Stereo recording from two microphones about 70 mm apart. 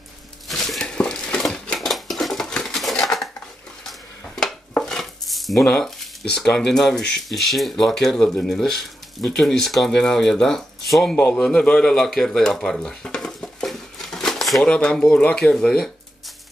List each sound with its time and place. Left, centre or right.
0.5 s dishes: centre
4.4 s dishes: centre
5.7 s a man's voice: centre
11.1 s a man's voice: left
11.4 s a man's voice: centre